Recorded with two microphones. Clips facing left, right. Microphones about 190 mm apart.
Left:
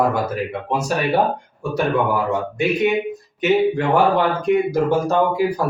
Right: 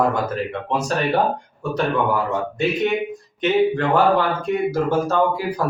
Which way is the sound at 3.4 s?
15° left (ahead or behind).